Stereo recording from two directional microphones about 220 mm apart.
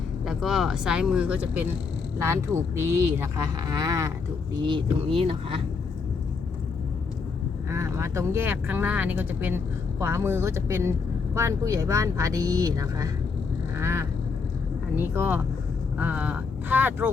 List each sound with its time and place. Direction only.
0.3 s speech: centre (ahead or behind); by 5.6 s 25° right (ahead or behind)
7.7 s speech: 10° right (ahead or behind)
13.7 s duck: 10° right (ahead or behind)
14.9 s speech: 10° right (ahead or behind)